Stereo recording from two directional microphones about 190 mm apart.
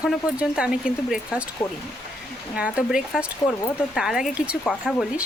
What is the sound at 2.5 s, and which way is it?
Speech, 5° right (ahead or behind).